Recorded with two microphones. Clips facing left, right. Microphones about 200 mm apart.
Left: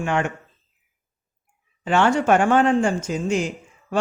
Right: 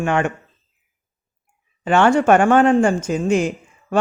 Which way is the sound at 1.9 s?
55° right (ahead or behind).